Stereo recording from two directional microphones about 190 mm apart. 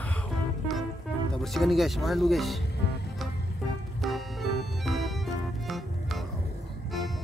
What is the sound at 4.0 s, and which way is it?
Music, centre (ahead or behind).